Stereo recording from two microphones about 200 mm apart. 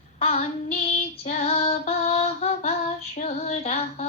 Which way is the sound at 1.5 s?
30° left (ahead or behind).